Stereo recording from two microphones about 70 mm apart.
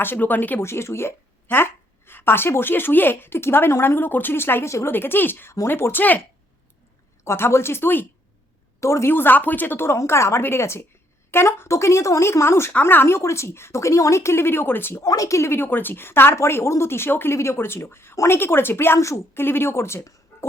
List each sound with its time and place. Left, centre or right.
0.0 s speech: left
0.6 s speech: left
7.3 s speech: left
8.8 s a woman's voice: left
9.0 s speech: left
15.0 s speech: left
18.9 s speech: left